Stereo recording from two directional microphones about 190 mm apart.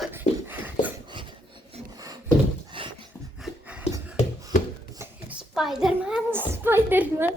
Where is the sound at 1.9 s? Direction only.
20° right (ahead or behind).